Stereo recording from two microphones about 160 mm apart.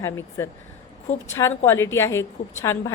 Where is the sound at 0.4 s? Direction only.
15° left (ahead or behind).